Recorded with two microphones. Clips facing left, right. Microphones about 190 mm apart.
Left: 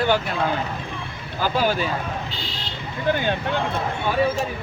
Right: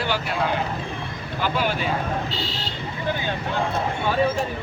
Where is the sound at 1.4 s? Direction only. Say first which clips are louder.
Left 3 dB; 40° left (ahead or behind).